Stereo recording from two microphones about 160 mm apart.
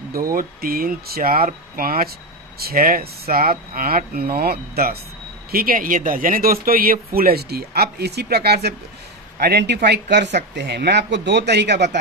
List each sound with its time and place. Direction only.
0.1 s speech: 65° right (ahead or behind); by 12.0 s 90° right